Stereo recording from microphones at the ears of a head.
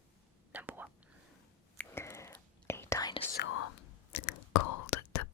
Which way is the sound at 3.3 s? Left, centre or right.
Left.